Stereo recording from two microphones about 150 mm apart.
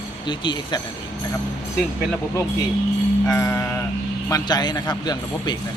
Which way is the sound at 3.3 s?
15° left (ahead or behind).